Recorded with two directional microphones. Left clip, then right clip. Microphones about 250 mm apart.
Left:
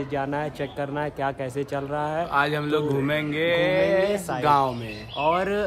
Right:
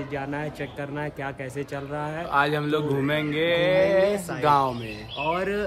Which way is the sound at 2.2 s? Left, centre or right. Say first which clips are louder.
Right 4 dB; centre.